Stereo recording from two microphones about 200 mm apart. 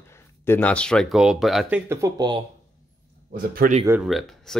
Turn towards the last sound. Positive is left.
turn(degrees=0)  # may be behind; listen again after turning